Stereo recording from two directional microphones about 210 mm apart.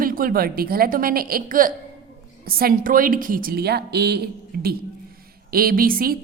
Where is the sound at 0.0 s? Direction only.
45° right (ahead or behind).